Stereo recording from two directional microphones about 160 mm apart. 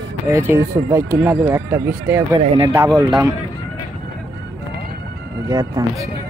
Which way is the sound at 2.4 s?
35° right (ahead or behind).